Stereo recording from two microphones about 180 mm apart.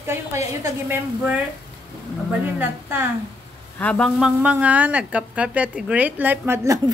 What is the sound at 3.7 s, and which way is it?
Speech, 5° left (ahead or behind).